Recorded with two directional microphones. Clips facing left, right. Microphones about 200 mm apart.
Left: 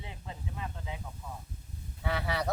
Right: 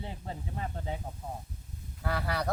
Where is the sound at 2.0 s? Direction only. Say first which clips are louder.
Even; centre (ahead or behind).